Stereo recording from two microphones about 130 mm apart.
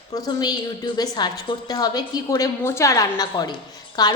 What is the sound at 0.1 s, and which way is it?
A woman's voice, 30° left (ahead or behind).